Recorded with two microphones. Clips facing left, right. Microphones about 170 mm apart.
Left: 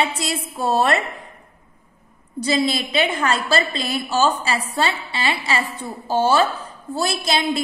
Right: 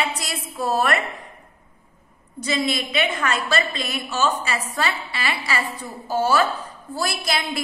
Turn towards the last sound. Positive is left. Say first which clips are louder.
# left 5 dB
turn(degrees=25)  # may be behind; listen again after turning